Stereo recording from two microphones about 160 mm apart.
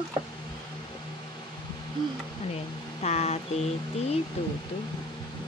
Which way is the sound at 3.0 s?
45° left (ahead or behind).